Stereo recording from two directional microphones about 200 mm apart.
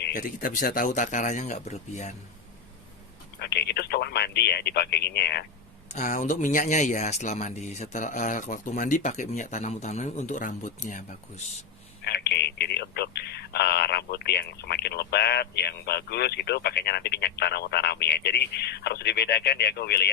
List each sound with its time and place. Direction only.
0.0 s speech: 45° left (ahead or behind)
3.3 s speech: 55° left (ahead or behind)
5.9 s speech: 40° left (ahead or behind)
12.0 s speech: 55° left (ahead or behind)